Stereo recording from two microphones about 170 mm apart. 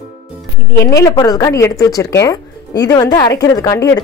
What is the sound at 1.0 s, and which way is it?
A woman's voice, 20° left (ahead or behind).